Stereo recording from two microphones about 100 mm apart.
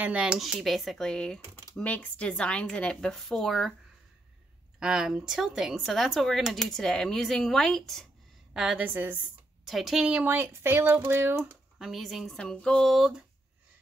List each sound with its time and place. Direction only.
0.0 s speech: 10° right (ahead or behind)
4.7 s speech: 5° right (ahead or behind)
8.5 s a woman's voice: 10° right (ahead or behind)
9.7 s speech: centre (ahead or behind)
10.2 s speech: 20° right (ahead or behind)
11.8 s speech: centre (ahead or behind)